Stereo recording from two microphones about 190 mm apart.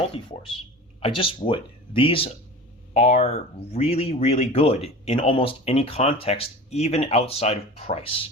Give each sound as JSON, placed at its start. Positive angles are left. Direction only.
{"t": 0.1, "sound": "speech", "side_deg": 30}